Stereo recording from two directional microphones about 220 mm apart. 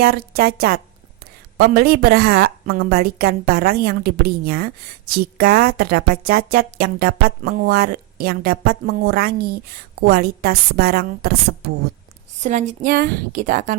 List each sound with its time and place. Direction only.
0.0 s a woman's voice: 45° right (ahead or behind)
12.4 s a woman's voice: 35° right (ahead or behind)